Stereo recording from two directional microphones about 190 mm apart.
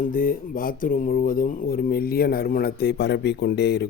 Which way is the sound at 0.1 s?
45° left (ahead or behind).